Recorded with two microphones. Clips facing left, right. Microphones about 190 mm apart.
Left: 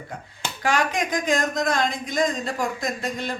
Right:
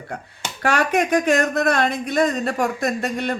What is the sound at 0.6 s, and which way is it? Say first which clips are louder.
Speech: right 4 dB; 65° right (ahead or behind).